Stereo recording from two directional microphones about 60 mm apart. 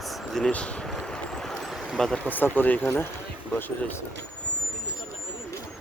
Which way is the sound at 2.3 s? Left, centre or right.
Left.